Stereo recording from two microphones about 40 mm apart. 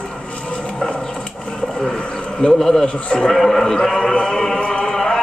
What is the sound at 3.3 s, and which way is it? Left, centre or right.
Speech, centre.